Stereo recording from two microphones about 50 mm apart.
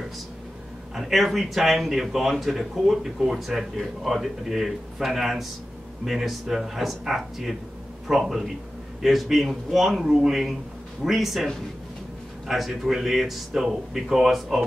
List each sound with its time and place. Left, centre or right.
0.9 s speech: centre
12.4 s speech: centre